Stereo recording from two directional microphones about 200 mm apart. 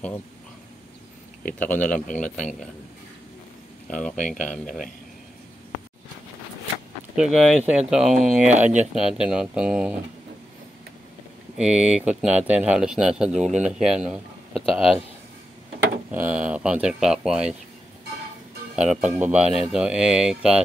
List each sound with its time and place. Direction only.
1.4 s speech: 10° left (ahead or behind)
3.8 s speech: 5° left (ahead or behind)
7.2 s speech: 5° right (ahead or behind)
11.5 s speech: 5° right (ahead or behind)
16.1 s speech: 10° right (ahead or behind)
18.8 s speech: 5° right (ahead or behind)